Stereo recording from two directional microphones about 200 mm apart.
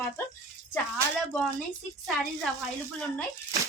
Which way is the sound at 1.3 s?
5° left (ahead or behind).